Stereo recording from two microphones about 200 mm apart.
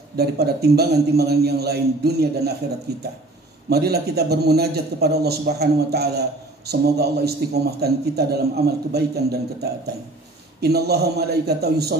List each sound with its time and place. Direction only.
0.2 s a man's voice: 55° right (ahead or behind)